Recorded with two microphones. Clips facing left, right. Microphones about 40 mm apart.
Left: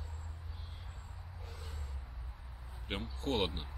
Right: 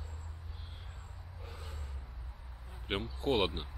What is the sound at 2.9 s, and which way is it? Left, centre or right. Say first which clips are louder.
Speech: right 4 dB; centre.